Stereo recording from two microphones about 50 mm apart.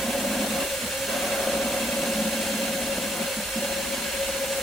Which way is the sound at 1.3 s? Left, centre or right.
Centre.